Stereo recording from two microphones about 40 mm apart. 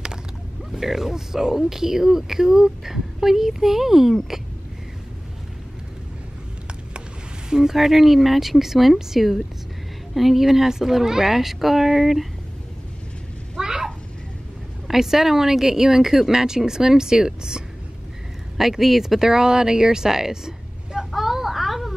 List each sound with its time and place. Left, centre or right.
0.7 s speech: centre
7.4 s speech: centre
13.6 s a sound: centre
14.9 s speech: centre
18.6 s speech: centre
21.1 s a sound: centre